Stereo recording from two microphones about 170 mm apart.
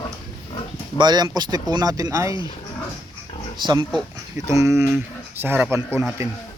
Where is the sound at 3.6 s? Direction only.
25° right (ahead or behind).